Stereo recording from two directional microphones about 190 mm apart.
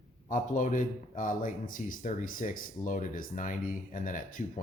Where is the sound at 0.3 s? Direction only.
45° left (ahead or behind).